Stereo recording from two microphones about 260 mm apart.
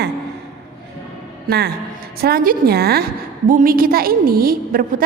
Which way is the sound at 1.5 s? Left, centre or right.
Right.